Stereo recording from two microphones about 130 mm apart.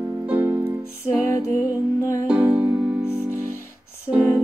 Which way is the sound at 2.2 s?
10° right (ahead or behind).